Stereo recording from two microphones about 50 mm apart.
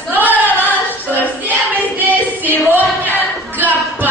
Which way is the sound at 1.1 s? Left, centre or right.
Left.